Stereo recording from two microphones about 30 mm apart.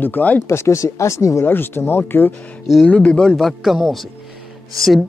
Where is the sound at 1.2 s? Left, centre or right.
Left.